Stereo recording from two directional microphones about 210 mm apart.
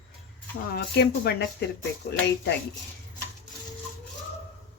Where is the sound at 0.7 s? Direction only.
50° left (ahead or behind).